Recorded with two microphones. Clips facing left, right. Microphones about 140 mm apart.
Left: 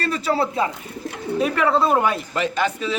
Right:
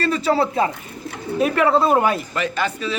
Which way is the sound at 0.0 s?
30° right (ahead or behind).